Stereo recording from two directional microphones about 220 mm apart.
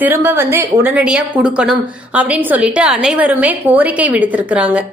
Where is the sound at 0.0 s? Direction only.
10° right (ahead or behind).